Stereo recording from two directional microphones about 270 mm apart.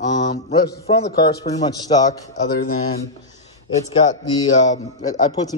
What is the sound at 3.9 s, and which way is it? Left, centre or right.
A man's voice, centre.